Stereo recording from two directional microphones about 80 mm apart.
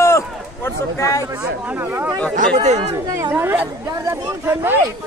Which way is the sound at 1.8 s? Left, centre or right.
Right.